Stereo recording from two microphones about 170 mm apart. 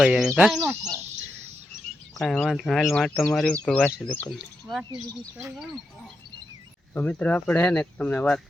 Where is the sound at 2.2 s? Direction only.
Centre (ahead or behind).